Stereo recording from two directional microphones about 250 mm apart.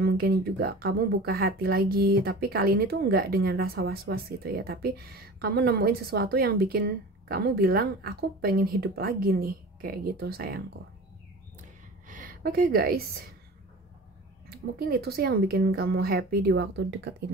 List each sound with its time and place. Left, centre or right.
0.0 s speech: right
12.1 s a woman's voice: right
14.5 s speech: right